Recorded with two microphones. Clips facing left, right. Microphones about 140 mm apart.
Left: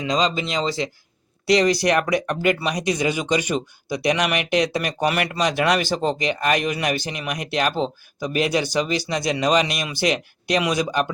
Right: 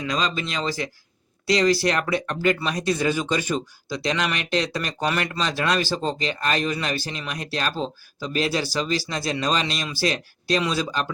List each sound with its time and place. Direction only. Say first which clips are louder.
0.0 s speech: left 4 dB; 20° left (ahead or behind)